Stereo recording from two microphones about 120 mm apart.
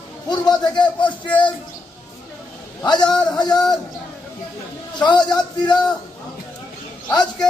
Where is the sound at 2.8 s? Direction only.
35° left (ahead or behind).